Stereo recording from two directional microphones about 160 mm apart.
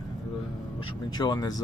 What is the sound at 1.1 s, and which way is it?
Speech, 25° left (ahead or behind).